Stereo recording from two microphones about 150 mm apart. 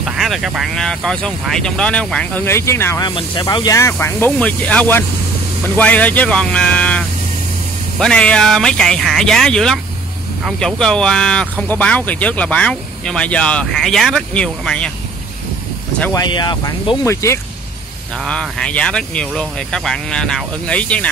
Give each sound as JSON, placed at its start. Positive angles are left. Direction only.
{"t": 0.0, "sound": "speech", "side_deg": 0}
{"t": 3.1, "sound": "speech", "side_deg": 30}
{"t": 8.0, "sound": "speech", "side_deg": 5}
{"t": 16.1, "sound": "speech", "side_deg": 30}
{"t": 17.0, "sound": "speech", "side_deg": 20}
{"t": 18.2, "sound": "speech", "side_deg": 5}